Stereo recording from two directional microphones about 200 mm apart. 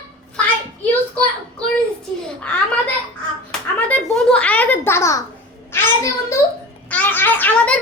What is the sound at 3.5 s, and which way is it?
Hands, 5° left (ahead or behind).